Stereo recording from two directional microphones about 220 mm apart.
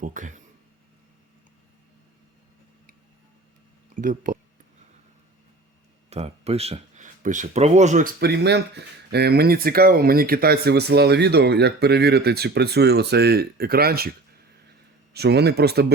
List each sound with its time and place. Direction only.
0.0 s speech: 35° right (ahead or behind)
3.9 s speech: 40° right (ahead or behind)
6.1 s speech: 30° right (ahead or behind); by 14.1 s 45° right (ahead or behind)
15.1 s speech: 45° right (ahead or behind)